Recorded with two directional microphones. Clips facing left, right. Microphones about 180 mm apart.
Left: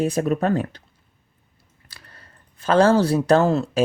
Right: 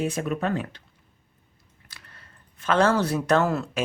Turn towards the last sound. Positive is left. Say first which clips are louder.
# left 5 dB
turn(degrees=30)  # may be behind; listen again after turning